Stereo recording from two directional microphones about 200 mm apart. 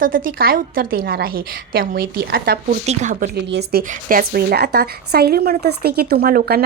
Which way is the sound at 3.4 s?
55° right (ahead or behind).